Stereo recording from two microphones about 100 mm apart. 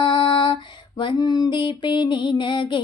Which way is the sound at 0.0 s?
50° left (ahead or behind).